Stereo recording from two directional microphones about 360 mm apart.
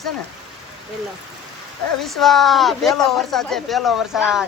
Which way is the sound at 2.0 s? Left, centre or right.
Centre.